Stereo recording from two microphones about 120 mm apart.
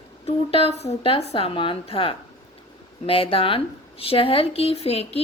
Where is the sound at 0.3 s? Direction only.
55° left (ahead or behind).